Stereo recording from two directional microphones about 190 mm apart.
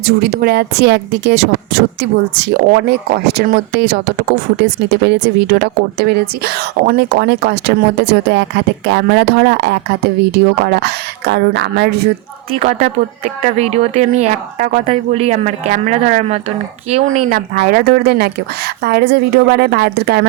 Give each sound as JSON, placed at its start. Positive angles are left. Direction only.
{"t": 0.0, "sound": "speech", "side_deg": -55}
{"t": 12.5, "sound": "speech", "side_deg": -40}